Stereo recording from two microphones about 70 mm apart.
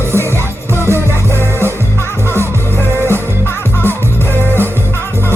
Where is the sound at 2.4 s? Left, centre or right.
Right.